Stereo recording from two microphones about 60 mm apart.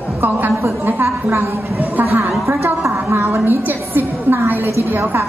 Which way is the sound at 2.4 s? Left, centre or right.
Right.